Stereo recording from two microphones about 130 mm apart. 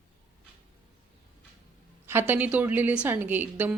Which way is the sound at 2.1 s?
15° right (ahead or behind).